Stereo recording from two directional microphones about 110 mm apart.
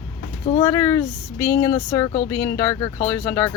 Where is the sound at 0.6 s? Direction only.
25° left (ahead or behind).